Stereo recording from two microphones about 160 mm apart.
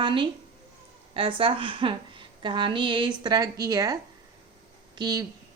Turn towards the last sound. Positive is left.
turn(degrees=-25)  # may be behind; listen again after turning